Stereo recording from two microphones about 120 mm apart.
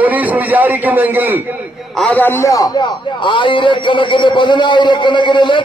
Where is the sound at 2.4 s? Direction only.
30° left (ahead or behind).